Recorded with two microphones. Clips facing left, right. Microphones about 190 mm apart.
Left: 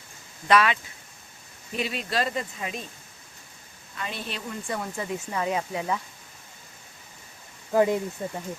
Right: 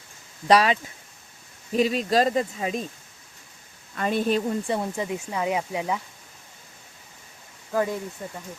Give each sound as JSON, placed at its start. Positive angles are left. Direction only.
{"t": 0.4, "sound": "speech", "side_deg": -35}
{"t": 3.9, "sound": "speech", "side_deg": -50}
{"t": 4.6, "sound": "speech", "side_deg": -25}
{"t": 7.7, "sound": "speech", "side_deg": 20}